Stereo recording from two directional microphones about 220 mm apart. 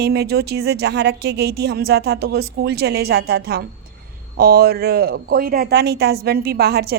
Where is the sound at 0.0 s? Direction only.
45° right (ahead or behind).